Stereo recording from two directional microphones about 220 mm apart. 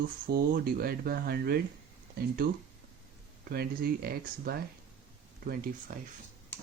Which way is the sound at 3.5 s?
45° right (ahead or behind).